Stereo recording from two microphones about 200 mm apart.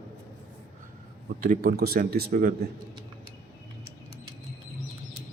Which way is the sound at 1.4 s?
45° right (ahead or behind).